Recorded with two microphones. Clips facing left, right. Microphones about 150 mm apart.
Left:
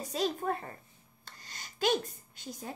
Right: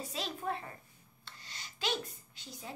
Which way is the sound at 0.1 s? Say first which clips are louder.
Left 8 dB; 45° left (ahead or behind).